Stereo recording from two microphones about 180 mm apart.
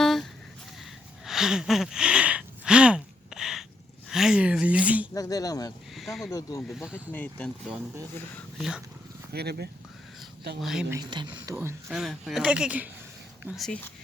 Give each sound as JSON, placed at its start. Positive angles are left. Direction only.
{"t": 0.0, "sound": "a sound", "side_deg": 0}
{"t": 5.1, "sound": "speech", "side_deg": 20}
{"t": 5.9, "sound": "speech", "side_deg": 0}
{"t": 6.3, "sound": "speech", "side_deg": 20}
{"t": 6.7, "sound": "speech", "side_deg": -5}
{"t": 7.1, "sound": "speech", "side_deg": 10}
{"t": 9.3, "sound": "speech", "side_deg": -65}
{"t": 10.6, "sound": "speech", "side_deg": 0}
{"t": 10.8, "sound": "speech", "side_deg": -20}
{"t": 11.9, "sound": "speech", "side_deg": 0}